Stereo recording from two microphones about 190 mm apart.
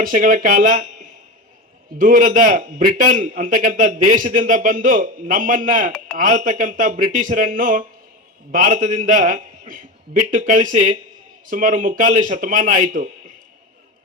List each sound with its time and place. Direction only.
0.0 s a man's voice: 45° right (ahead or behind)